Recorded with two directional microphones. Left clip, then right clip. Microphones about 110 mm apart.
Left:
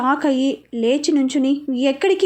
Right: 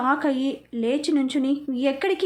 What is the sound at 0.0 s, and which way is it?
A woman's voice, 25° left (ahead or behind).